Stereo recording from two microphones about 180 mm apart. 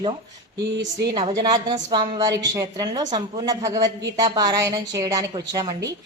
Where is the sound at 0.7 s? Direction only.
75° right (ahead or behind).